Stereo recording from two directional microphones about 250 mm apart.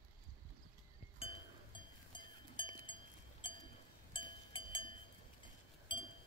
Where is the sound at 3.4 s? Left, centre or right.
Centre.